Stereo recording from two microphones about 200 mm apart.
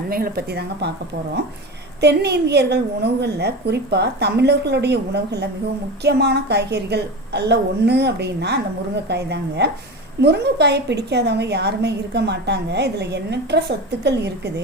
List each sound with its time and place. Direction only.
0.1 s speech: 50° right (ahead or behind)
2.0 s a woman's voice: 55° right (ahead or behind)